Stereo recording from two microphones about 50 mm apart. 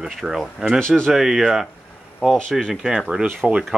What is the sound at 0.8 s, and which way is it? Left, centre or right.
Speech, centre.